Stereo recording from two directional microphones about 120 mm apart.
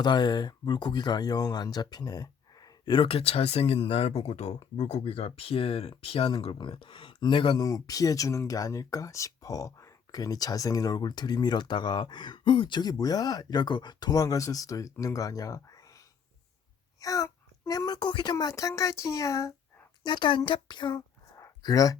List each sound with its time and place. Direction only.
0.0 s speech: 35° left (ahead or behind)
17.0 s a child's voice: 30° left (ahead or behind)
20.1 s speech: 40° left (ahead or behind)
21.3 s a sound: 30° left (ahead or behind)